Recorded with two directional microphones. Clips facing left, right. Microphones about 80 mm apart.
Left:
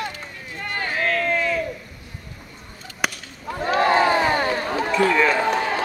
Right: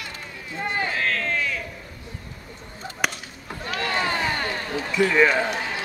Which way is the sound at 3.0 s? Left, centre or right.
Centre.